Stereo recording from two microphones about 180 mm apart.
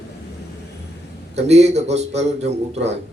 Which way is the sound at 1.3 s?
35° right (ahead or behind).